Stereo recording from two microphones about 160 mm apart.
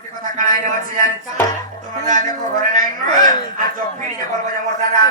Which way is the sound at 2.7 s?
25° left (ahead or behind).